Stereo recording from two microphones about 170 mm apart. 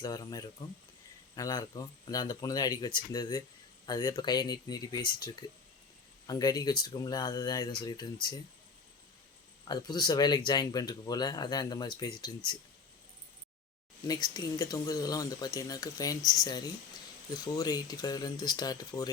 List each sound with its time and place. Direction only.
0.0 s speech: 20° left (ahead or behind)
9.6 s speech: 25° left (ahead or behind)
14.1 s speech: 25° left (ahead or behind)